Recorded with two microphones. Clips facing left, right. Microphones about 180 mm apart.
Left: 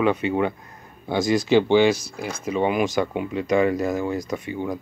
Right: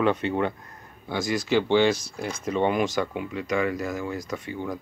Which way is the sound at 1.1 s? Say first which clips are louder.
Left 6 dB; 20° left (ahead or behind).